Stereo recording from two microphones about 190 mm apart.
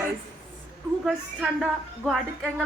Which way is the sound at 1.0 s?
5° right (ahead or behind).